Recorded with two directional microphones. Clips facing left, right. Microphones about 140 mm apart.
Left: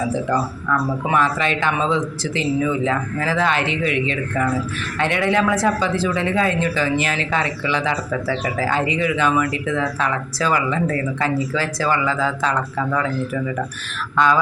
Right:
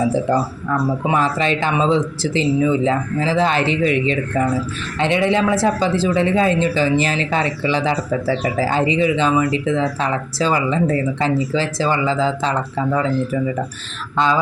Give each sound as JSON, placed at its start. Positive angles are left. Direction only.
{"t": 1.0, "sound": "a man's voice", "side_deg": -30}